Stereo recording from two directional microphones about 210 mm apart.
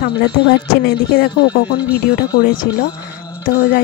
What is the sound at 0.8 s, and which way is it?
Speech, 50° left (ahead or behind).